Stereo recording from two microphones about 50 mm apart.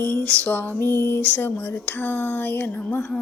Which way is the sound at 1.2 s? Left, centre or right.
Left.